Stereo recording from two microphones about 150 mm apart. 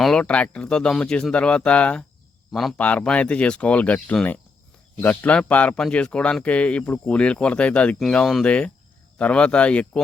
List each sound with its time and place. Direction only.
0.0 s speech: 5° left (ahead or behind)